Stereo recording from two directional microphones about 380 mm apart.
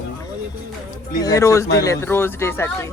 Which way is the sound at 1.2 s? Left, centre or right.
Centre.